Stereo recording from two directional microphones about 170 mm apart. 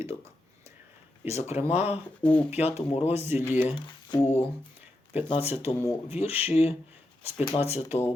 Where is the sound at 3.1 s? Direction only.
10° right (ahead or behind).